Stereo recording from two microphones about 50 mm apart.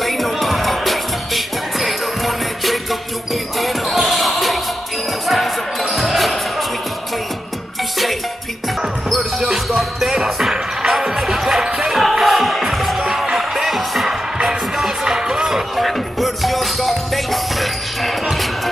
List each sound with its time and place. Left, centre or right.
0.0 s music: centre
3.5 s basketball bounce: centre
9.7 s music: centre